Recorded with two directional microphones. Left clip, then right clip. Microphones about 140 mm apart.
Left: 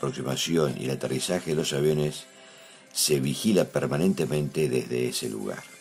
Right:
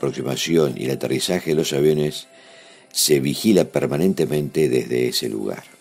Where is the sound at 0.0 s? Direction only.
25° right (ahead or behind).